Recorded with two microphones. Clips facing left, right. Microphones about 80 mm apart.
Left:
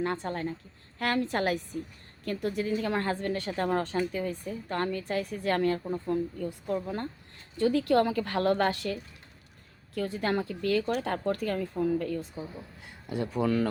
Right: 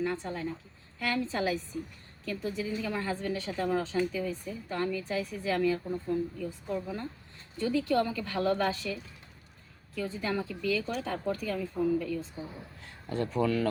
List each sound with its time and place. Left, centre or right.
0.0 s a woman's voice: left
13.1 s speech: centre